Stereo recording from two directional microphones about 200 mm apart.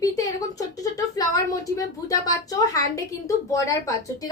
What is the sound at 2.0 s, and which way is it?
A woman's voice, 15° left (ahead or behind).